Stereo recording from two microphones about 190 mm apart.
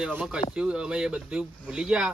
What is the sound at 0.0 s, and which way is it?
Speech, 5° right (ahead or behind).